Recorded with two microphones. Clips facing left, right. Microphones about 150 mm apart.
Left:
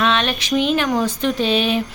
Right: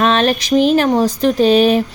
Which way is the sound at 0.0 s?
40° right (ahead or behind).